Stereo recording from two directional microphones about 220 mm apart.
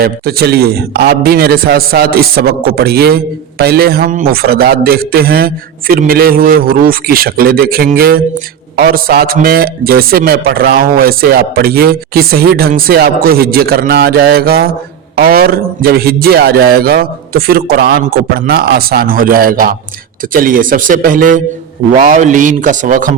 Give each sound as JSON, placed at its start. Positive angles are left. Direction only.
{"t": 0.0, "sound": "a man's voice", "side_deg": -45}